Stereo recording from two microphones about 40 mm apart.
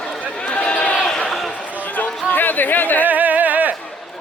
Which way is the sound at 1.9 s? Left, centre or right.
Left.